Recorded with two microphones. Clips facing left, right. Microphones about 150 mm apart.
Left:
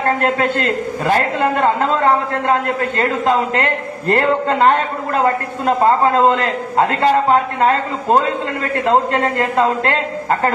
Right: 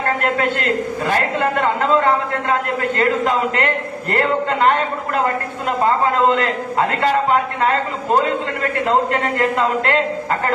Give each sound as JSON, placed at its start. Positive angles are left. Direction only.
{"t": 3.0, "sound": "a man's voice", "side_deg": 35}
{"t": 7.0, "sound": "a man's voice", "side_deg": 35}